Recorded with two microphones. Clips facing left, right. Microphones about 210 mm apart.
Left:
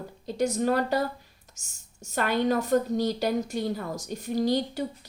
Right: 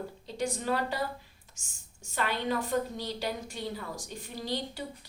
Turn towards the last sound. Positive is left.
turn(degrees=45)  # may be behind; listen again after turning